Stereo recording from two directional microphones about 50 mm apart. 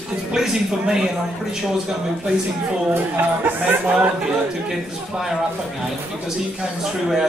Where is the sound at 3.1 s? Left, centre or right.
Right.